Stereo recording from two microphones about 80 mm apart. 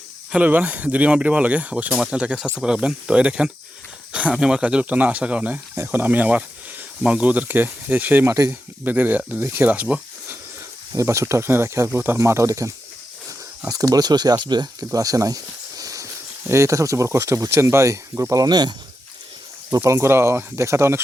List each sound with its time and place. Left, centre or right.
0.3 s speech: centre
10.9 s speech: right
14.9 s speech: right
15.8 s a sound: right
16.5 s speech: right
18.4 s speech: right
19.7 s speech: right